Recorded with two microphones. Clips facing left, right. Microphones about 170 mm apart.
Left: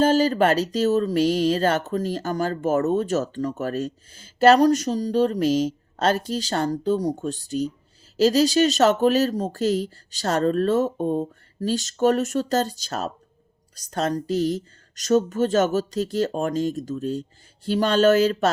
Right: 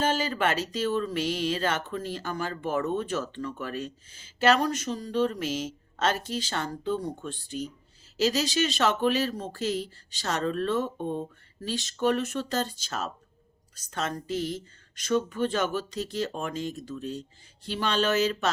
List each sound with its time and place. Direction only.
0.0 s speech: 40° left (ahead or behind)